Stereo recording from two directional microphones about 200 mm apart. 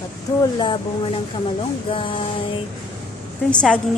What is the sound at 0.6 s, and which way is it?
Speech, 25° left (ahead or behind).